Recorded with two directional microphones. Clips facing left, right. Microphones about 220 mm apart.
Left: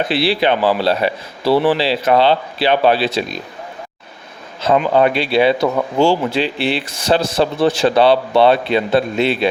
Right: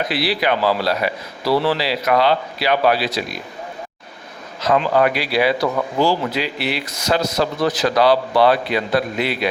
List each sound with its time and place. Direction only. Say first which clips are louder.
0.0 s speech: left 4 dB; 30° left (ahead or behind)
4.8 s speech: left 3 dB; 25° left (ahead or behind)